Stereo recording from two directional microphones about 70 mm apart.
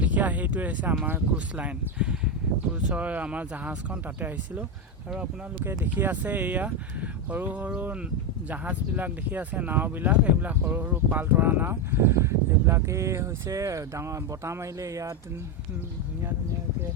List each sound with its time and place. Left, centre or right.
0.0 s speech: right
5.6 s speech: right